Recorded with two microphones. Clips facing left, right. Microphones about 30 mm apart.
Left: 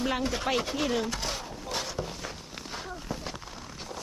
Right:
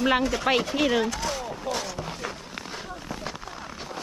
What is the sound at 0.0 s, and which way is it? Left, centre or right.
Speech, right.